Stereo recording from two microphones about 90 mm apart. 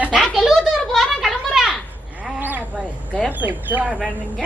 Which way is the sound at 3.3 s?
20° right (ahead or behind).